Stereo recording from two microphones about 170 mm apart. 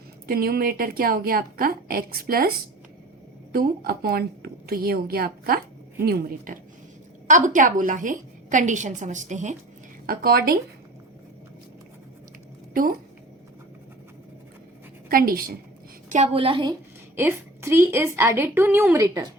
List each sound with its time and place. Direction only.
0.3 s a woman's voice: 65° right (ahead or behind)
3.5 s a woman's voice: 65° right (ahead or behind); by 9.6 s 45° right (ahead or behind)
10.1 s a woman's voice: 60° right (ahead or behind)
15.1 s a woman's voice: 60° right (ahead or behind)
16.0 s a woman's voice: 40° right (ahead or behind)
17.2 s a woman's voice: 15° right (ahead or behind)